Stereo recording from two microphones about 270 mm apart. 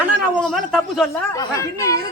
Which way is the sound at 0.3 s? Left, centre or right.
Centre.